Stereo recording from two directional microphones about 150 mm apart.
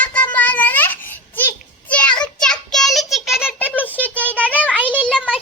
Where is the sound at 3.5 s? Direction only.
10° left (ahead or behind).